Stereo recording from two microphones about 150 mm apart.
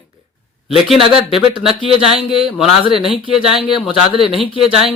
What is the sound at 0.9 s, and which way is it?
Speech, centre (ahead or behind).